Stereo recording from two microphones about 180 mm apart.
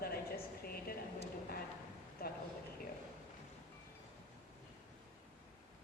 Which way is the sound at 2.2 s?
55° left (ahead or behind).